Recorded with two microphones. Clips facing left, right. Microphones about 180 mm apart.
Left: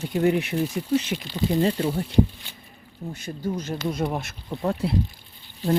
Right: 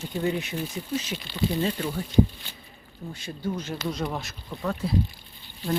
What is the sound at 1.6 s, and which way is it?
Speech, 30° left (ahead or behind).